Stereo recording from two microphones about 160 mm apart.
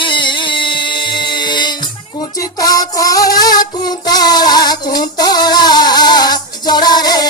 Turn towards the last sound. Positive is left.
turn(degrees=25)  # may be behind; listen again after turning